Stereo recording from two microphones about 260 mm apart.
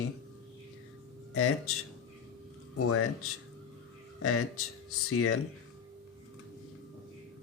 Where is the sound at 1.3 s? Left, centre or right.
Left.